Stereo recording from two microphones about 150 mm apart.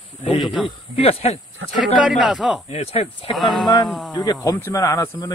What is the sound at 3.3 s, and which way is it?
Speech, centre (ahead or behind).